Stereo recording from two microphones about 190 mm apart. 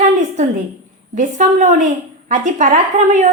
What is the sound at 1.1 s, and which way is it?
A woman's voice, 40° right (ahead or behind).